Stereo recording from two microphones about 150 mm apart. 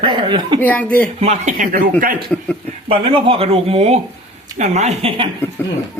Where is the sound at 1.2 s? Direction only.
50° right (ahead or behind); by 1.9 s 70° right (ahead or behind).